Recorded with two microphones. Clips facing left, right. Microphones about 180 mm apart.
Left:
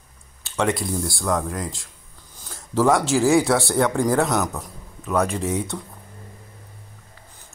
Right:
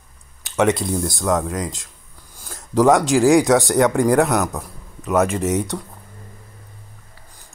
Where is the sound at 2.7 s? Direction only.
15° right (ahead or behind).